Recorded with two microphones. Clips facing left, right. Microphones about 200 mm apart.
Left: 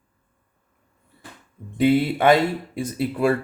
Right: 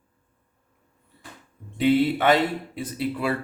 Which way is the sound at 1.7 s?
45° left (ahead or behind).